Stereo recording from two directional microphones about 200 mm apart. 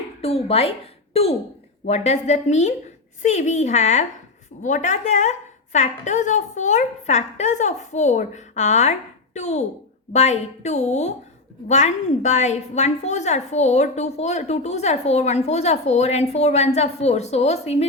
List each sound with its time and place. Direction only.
0.2 s a woman's voice: 30° left (ahead or behind)